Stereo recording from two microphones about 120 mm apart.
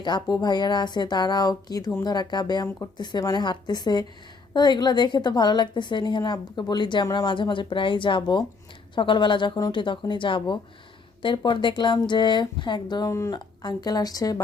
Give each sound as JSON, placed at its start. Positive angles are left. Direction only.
{"t": 0.0, "sound": "a woman's voice", "side_deg": 40}
{"t": 13.3, "sound": "a woman's voice", "side_deg": 35}